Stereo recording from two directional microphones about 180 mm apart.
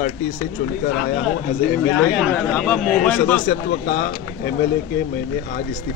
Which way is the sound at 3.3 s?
50° left (ahead or behind).